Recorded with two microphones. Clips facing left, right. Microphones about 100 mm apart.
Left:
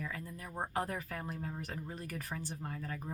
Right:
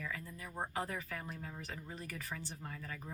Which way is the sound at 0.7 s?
50° left (ahead or behind).